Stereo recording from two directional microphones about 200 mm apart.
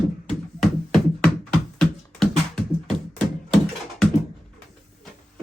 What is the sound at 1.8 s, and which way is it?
Music, 5° left (ahead or behind).